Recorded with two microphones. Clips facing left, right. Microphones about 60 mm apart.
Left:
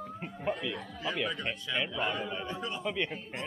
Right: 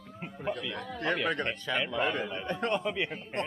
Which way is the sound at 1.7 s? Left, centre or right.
Right.